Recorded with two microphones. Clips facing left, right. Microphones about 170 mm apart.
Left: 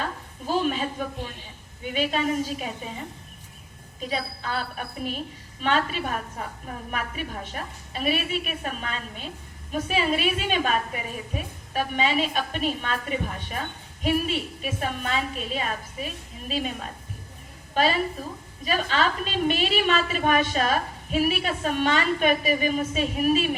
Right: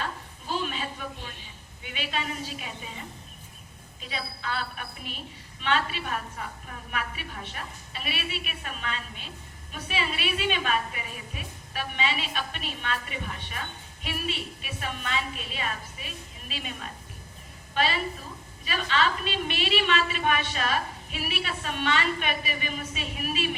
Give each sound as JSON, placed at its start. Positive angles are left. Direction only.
{"t": 0.0, "sound": "a sound", "side_deg": 45}
{"t": 1.8, "sound": "a woman's voice", "side_deg": 45}
{"t": 4.1, "sound": "a woman's voice", "side_deg": 45}